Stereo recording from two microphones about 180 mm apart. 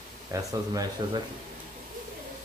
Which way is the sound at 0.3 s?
20° right (ahead or behind).